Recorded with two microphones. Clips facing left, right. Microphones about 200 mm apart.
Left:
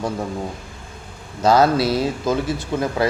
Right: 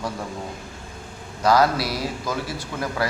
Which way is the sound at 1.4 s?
25° left (ahead or behind).